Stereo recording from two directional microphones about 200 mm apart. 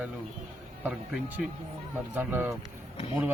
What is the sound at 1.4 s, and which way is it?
A man's voice, 5° right (ahead or behind).